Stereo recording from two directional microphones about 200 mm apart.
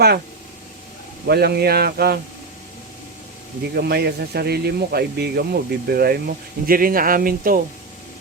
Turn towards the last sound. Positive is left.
turn(degrees=-45)  # may be behind; listen again after turning